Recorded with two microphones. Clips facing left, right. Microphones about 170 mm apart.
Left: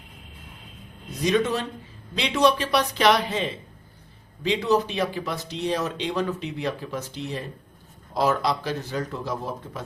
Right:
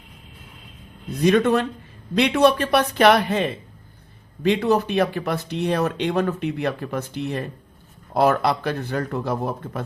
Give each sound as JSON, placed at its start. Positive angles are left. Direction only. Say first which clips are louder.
{"t": 1.2, "sound": "speech", "louder": "right 5 dB", "side_deg": -60}